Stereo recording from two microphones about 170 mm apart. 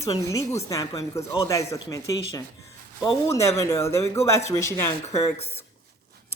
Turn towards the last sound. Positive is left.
turn(degrees=15)  # may be behind; listen again after turning